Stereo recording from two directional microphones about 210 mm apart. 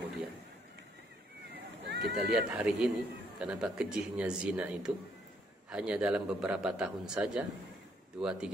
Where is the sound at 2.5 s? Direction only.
5° right (ahead or behind).